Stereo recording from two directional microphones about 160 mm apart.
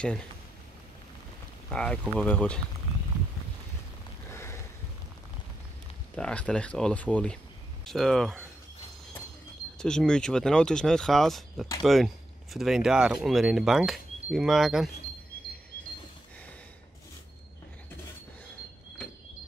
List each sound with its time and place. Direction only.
1.7 s speech: 5° left (ahead or behind)
4.3 s a sound: 15° left (ahead or behind)
6.1 s speech: 5° left (ahead or behind)
9.8 s speech: 5° left (ahead or behind)